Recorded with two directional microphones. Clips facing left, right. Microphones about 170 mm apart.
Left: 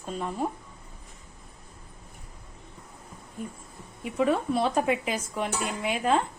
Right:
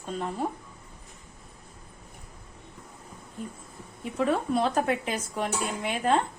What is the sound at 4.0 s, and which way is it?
Speech, 5° left (ahead or behind).